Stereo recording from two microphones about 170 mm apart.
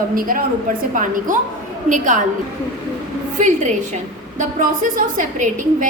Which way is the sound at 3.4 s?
45° right (ahead or behind).